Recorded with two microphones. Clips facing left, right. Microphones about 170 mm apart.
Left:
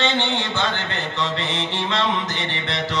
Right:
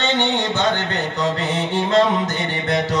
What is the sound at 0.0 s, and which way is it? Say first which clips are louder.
Mantra: right 3 dB; 45° right (ahead or behind).